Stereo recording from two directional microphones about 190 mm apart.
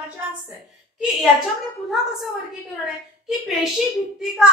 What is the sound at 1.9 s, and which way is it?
Speech, 5° right (ahead or behind).